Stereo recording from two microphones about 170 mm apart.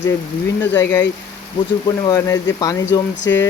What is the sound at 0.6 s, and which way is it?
Speech, 10° left (ahead or behind).